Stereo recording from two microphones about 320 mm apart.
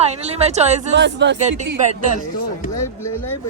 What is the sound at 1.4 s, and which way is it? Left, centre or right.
Speech, right.